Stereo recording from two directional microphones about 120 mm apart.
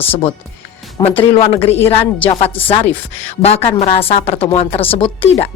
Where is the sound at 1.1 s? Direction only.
50° left (ahead or behind).